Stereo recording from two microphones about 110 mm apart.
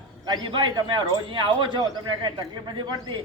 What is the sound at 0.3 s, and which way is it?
Speech, 45° right (ahead or behind).